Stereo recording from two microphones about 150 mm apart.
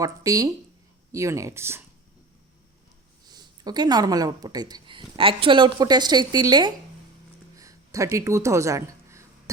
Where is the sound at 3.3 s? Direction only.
30° right (ahead or behind).